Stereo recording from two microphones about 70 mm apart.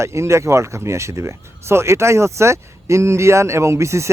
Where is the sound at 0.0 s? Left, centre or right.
Right.